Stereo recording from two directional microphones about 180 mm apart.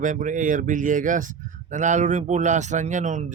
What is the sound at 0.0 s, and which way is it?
Speech, 45° right (ahead or behind).